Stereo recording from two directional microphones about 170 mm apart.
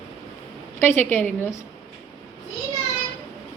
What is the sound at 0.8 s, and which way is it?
Speech, 10° left (ahead or behind).